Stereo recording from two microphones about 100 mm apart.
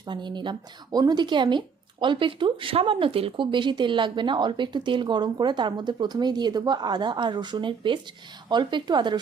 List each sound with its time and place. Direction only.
0.0 s speech: 50° right (ahead or behind)